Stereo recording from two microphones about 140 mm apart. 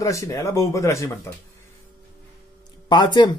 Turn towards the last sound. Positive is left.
turn(degrees=30)  # may be behind; listen again after turning